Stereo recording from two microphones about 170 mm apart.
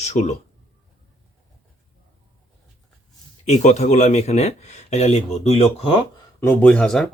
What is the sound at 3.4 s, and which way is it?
Speech, 40° left (ahead or behind).